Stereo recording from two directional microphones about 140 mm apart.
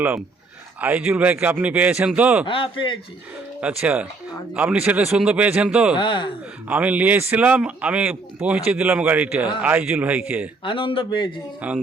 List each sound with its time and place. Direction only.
0.8 s speech: 10° right (ahead or behind)
2.5 s speech: 40° left (ahead or behind)
3.6 s speech: 10° right (ahead or behind)
6.0 s speech: 35° left (ahead or behind)
6.7 s speech: 10° right (ahead or behind)
10.6 s speech: 35° left (ahead or behind)
11.6 s speech: 10° right (ahead or behind)